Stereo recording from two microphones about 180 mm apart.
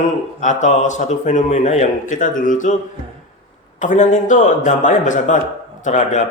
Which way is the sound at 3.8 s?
40° left (ahead or behind).